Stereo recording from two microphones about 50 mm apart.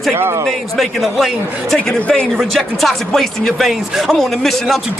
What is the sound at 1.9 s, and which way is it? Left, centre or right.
A man's voice, centre.